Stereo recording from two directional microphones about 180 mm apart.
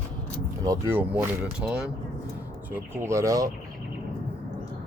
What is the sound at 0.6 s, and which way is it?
Speech, 15° right (ahead or behind).